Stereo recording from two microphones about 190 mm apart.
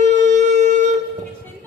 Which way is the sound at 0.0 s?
40° right (ahead or behind).